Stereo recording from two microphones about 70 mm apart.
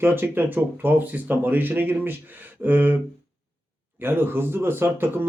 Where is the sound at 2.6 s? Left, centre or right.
Right.